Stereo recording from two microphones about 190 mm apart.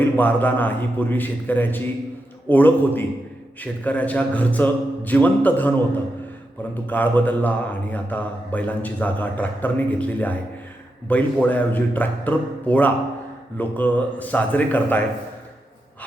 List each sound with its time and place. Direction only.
0.2 s speech: 10° left (ahead or behind)
6.8 s speech: 10° left (ahead or behind)